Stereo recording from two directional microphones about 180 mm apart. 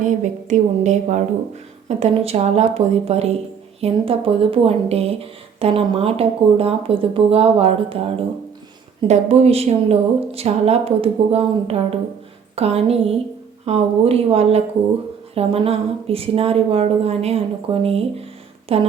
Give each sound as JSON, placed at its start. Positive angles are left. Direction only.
{"t": 0.0, "sound": "a woman's voice", "side_deg": -45}